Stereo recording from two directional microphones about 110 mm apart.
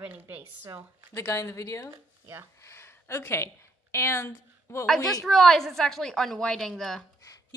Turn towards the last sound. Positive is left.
turn(degrees=5)  # may be behind; listen again after turning